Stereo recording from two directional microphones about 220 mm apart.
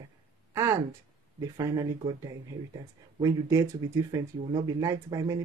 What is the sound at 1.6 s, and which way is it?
Speech, 15° right (ahead or behind).